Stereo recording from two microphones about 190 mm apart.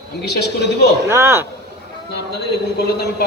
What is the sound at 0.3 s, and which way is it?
Speech, 60° left (ahead or behind).